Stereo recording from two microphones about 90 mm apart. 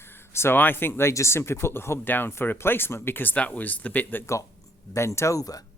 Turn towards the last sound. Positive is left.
turn(degrees=40)  # may be behind; listen again after turning